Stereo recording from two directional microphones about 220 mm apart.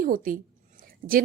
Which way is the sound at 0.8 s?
40° right (ahead or behind).